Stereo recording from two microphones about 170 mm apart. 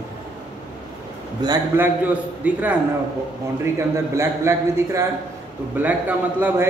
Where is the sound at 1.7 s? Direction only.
10° right (ahead or behind).